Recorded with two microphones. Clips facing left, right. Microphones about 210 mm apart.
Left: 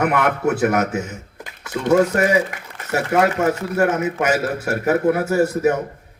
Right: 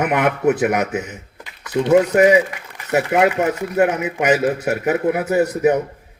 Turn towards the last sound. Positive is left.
turn(degrees=-20)  # may be behind; listen again after turning